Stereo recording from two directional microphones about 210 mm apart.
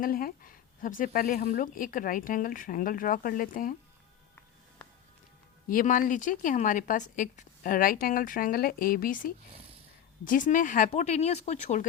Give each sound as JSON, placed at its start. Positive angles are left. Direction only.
{"t": 0.0, "sound": "speech", "side_deg": 45}
{"t": 5.6, "sound": "speech", "side_deg": 40}